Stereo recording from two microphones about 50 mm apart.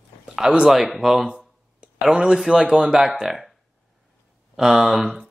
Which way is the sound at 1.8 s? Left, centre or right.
Centre.